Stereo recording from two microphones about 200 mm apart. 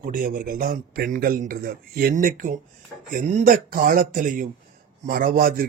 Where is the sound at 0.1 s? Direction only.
45° right (ahead or behind).